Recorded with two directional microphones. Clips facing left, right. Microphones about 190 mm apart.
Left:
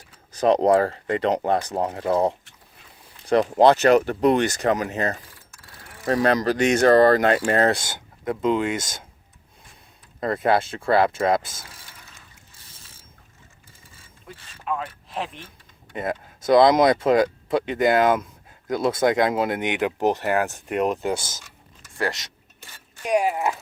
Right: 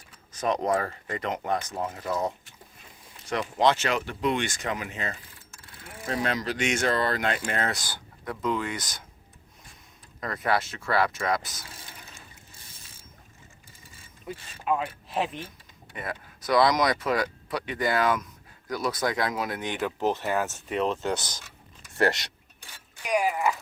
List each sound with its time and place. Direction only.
0.3 s speech: 35° left (ahead or behind)
3.2 s speech: 35° left (ahead or behind)
6.2 s speech: 40° left (ahead or behind)
7.8 s speech: 20° left (ahead or behind)
10.2 s speech: 30° left (ahead or behind)
11.9 s water: 20° right (ahead or behind)
14.3 s speech: 10° right (ahead or behind)
16.0 s speech: 25° left (ahead or behind)
23.2 s speech: centre (ahead or behind)